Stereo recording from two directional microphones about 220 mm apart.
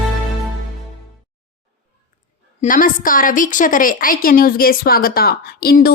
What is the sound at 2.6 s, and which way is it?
A woman's voice, 40° left (ahead or behind).